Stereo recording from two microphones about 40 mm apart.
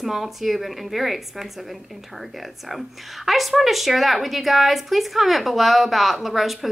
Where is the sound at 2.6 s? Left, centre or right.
Centre.